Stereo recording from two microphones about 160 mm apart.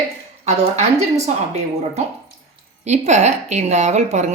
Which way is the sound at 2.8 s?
45° right (ahead or behind).